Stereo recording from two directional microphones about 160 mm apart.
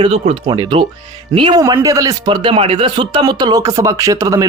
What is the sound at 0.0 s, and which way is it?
Speech, 35° right (ahead or behind).